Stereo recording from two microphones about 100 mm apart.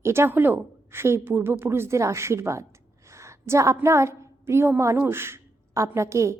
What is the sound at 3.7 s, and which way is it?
A woman's voice, 30° right (ahead or behind).